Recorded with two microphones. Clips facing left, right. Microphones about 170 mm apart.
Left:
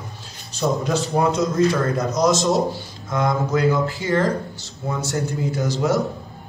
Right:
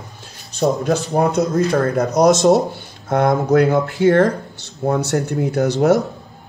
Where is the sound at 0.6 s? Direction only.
45° right (ahead or behind).